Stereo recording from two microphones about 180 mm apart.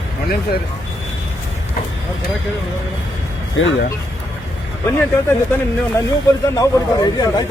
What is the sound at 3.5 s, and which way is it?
Speech, 80° left.